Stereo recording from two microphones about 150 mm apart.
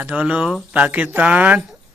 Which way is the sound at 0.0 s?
10° right (ahead or behind).